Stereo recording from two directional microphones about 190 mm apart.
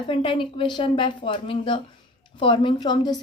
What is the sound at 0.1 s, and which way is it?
A woman's voice, 25° left (ahead or behind).